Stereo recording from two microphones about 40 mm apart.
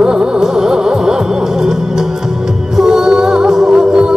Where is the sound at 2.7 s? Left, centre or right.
Centre.